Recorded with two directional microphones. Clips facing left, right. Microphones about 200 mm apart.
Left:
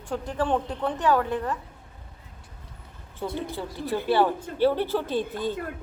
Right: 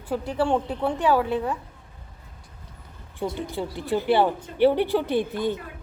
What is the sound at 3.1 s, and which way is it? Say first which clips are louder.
Speech: right 2 dB; 15° right (ahead or behind).